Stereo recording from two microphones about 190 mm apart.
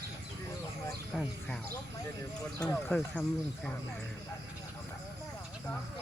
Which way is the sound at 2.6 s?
5° left (ahead or behind).